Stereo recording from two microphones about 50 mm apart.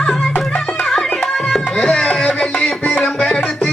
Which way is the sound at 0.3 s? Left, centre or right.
Left.